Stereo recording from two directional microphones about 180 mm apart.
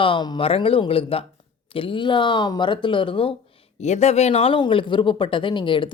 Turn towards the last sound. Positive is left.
turn(degrees=25)  # may be behind; listen again after turning